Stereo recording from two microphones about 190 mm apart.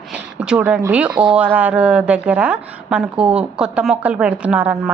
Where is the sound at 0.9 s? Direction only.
5° right (ahead or behind).